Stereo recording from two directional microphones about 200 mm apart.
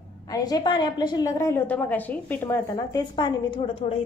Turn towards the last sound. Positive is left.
turn(degrees=25)  # may be behind; listen again after turning